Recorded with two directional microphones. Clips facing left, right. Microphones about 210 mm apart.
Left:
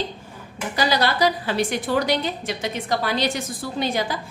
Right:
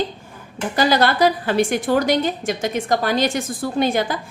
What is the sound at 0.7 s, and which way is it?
A woman's voice, 50° right (ahead or behind).